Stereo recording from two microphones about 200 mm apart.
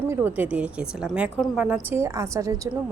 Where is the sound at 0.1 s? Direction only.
10° right (ahead or behind).